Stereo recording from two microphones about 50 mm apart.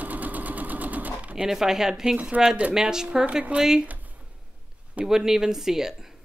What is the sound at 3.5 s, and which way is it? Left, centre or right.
Speech, right.